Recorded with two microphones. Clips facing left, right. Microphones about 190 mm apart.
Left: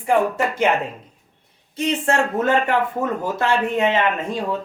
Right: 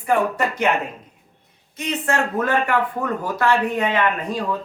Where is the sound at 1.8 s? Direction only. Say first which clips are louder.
Left 3 dB; 30° left (ahead or behind).